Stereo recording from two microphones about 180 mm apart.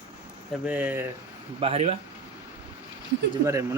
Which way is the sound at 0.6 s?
10° right (ahead or behind).